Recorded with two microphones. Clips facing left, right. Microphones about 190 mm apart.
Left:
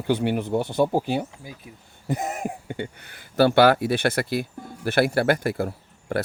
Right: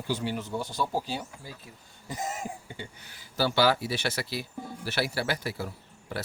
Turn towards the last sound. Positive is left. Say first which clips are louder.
# left 10 dB
turn(degrees=55)  # may be behind; listen again after turning